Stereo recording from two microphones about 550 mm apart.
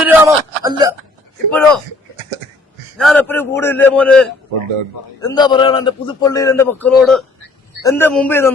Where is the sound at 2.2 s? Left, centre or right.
Right.